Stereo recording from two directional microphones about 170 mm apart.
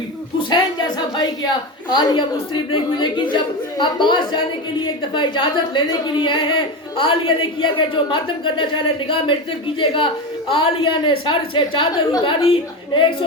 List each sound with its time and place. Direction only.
0.3 s a woman's voice: 25° left (ahead or behind)
9.7 s a woman's voice: 30° left (ahead or behind)